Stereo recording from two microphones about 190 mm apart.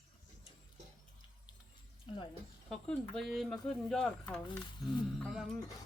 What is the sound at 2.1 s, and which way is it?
Speech, 25° left (ahead or behind).